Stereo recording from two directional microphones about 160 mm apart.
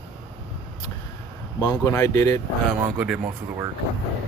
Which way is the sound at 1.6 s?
20° left (ahead or behind).